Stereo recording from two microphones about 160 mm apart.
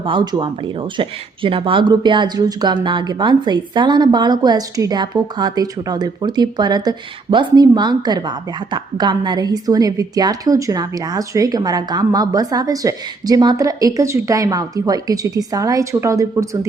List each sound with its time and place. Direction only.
0.0 s a woman's voice: 30° right (ahead or behind)